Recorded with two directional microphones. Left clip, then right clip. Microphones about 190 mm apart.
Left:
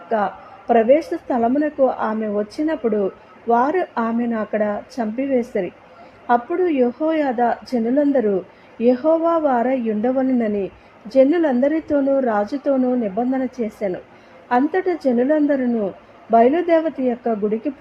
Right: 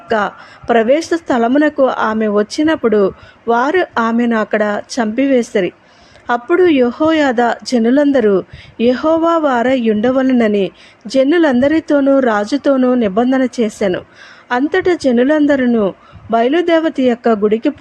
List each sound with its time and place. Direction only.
0.7 s a woman's voice: 25° right (ahead or behind)